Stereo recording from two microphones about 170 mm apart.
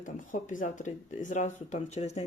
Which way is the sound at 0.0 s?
50° left (ahead or behind).